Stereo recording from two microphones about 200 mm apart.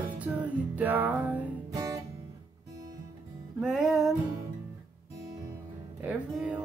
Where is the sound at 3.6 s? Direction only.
5° right (ahead or behind).